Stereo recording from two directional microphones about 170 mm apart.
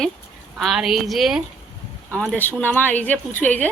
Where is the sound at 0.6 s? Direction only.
Centre (ahead or behind).